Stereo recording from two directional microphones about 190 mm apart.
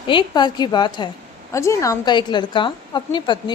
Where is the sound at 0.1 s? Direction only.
25° left (ahead or behind).